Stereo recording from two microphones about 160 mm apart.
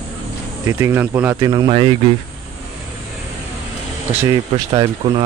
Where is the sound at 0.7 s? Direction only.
15° right (ahead or behind).